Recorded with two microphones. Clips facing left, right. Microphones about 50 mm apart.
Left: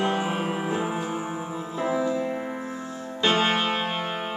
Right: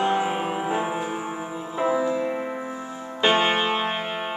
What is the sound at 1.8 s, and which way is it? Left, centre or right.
Music, centre.